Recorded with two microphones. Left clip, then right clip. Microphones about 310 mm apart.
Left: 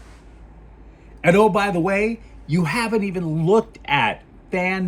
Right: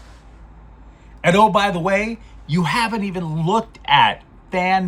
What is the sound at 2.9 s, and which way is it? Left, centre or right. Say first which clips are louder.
Speech: left 3 dB; right.